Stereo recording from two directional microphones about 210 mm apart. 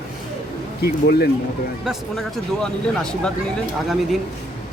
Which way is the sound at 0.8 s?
50° left (ahead or behind).